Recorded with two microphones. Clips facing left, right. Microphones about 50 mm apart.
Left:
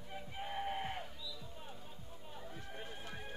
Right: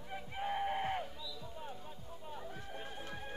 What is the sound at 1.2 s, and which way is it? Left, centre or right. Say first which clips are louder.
Music: right 3 dB; centre.